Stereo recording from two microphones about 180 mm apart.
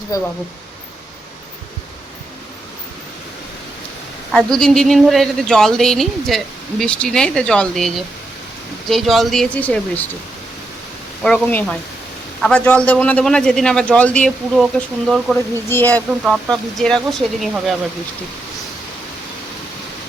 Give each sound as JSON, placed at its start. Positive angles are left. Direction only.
{"t": 0.1, "sound": "speech", "side_deg": 20}
{"t": 4.3, "sound": "speech", "side_deg": 0}
{"t": 11.2, "sound": "speech", "side_deg": 5}
{"t": 15.7, "sound": "speech", "side_deg": 10}
{"t": 16.2, "sound": "speech", "side_deg": 0}